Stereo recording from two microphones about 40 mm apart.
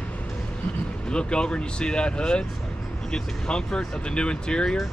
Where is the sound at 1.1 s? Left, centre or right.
Left.